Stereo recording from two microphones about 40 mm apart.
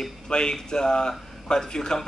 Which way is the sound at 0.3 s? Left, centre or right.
Centre.